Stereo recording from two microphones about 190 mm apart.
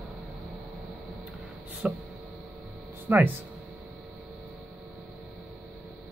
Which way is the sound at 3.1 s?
10° right (ahead or behind).